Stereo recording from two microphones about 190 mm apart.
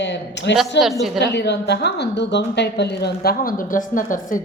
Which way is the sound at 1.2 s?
60° left (ahead or behind).